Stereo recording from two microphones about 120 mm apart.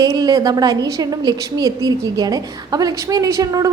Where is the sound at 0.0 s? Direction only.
30° right (ahead or behind).